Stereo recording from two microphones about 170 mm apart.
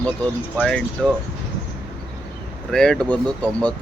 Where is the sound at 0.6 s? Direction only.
Centre (ahead or behind).